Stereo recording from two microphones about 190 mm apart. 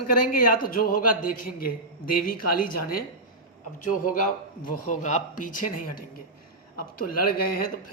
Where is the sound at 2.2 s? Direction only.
45° left (ahead or behind).